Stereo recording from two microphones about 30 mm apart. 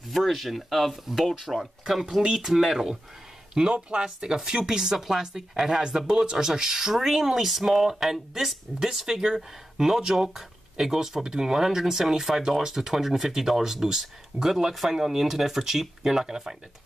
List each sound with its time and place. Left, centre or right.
0.1 s speech: centre
3.6 s speech: right